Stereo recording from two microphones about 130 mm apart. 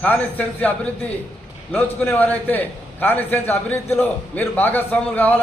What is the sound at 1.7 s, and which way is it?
A man's voice, 15° left (ahead or behind).